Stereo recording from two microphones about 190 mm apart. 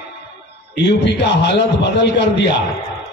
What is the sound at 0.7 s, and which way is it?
A man's voice, 65° left (ahead or behind).